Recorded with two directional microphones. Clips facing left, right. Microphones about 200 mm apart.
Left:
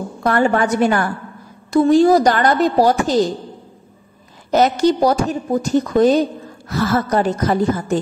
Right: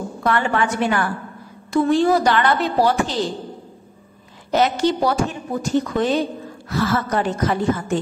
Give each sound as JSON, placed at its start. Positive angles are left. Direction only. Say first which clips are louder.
{"t": 0.2, "sound": "a woman's voice", "louder": "left 4 dB", "side_deg": 40}
{"t": 4.5, "sound": "a woman's voice", "louder": "left 4 dB", "side_deg": 40}